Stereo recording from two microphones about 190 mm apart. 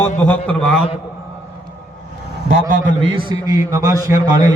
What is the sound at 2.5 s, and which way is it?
Speech, 45° right (ahead or behind).